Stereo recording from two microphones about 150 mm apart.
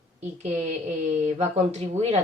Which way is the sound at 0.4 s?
50° right (ahead or behind).